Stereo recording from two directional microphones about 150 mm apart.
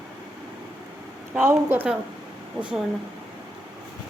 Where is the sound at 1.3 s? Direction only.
15° right (ahead or behind).